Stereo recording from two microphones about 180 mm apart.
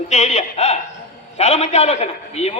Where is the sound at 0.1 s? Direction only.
40° left (ahead or behind).